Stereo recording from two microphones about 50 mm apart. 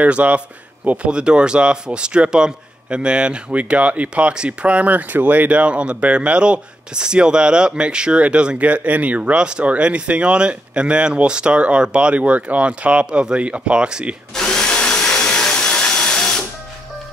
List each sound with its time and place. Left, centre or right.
0.0 s speech: right
14.3 s drill: centre